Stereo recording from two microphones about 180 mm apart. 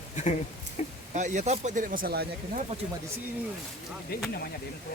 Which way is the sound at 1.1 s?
40° right (ahead or behind).